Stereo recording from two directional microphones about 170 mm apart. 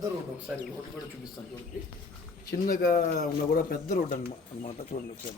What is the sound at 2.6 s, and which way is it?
Speech, 60° left (ahead or behind).